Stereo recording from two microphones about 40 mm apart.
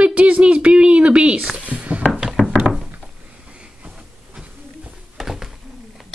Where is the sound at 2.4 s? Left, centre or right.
Left.